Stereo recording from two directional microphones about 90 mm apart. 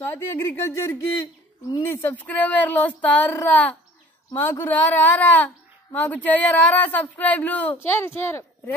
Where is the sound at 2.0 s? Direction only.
20° left (ahead or behind).